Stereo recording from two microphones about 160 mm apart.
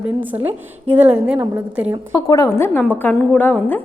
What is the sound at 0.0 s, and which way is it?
A woman's voice, 10° right (ahead or behind).